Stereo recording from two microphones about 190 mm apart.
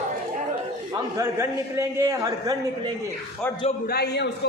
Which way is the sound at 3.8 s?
55° left (ahead or behind).